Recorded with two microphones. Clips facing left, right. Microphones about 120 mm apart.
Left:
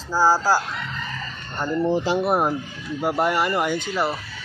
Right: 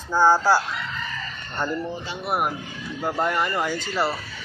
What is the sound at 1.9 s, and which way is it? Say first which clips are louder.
Speech: left 11 dB; 90° left.